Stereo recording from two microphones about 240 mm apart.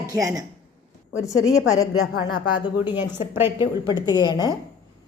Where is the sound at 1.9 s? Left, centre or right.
Left.